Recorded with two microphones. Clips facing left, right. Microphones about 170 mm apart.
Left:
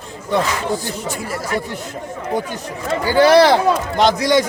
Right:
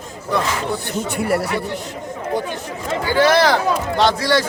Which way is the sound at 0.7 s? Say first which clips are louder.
Even; 60° right (ahead or behind).